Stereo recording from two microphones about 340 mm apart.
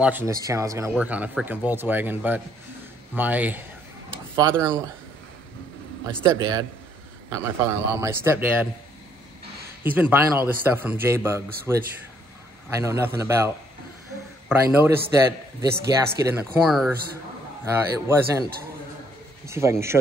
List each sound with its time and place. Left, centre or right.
0.0 s speech: centre
6.2 s a man's voice: centre
9.8 s a man's voice: centre
14.7 s a man's voice: centre
15.7 s speech: right
16.2 s speech: centre
17.9 s a man's voice: centre
19.4 s a man's voice: centre